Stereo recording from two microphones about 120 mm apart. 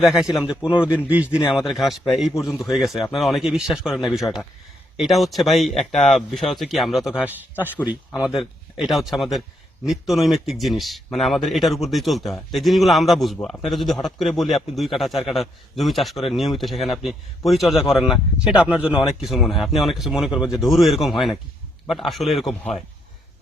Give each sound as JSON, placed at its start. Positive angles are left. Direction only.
{"t": 0.0, "sound": "a man's voice", "side_deg": -5}
{"t": 1.5, "sound": "a man's voice", "side_deg": 0}
{"t": 8.3, "sound": "a man's voice", "side_deg": -5}